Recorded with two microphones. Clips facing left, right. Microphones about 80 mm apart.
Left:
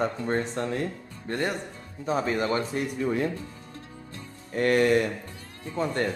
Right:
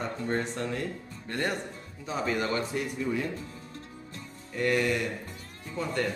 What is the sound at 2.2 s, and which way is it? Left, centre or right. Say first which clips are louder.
Speech: even; left.